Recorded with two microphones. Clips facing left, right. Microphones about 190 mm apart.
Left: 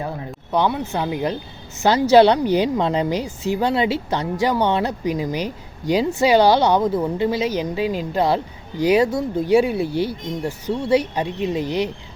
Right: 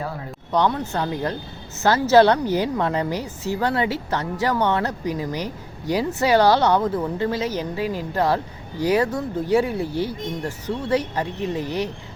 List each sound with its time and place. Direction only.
0.5 s a woman's voice: 10° left (ahead or behind)